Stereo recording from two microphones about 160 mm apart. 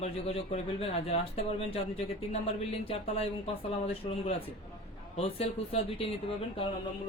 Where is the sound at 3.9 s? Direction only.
40° left (ahead or behind).